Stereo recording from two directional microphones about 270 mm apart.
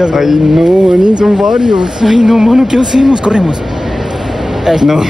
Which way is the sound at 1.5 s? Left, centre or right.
Centre.